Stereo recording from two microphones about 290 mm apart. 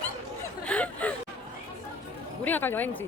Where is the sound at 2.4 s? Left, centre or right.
Centre.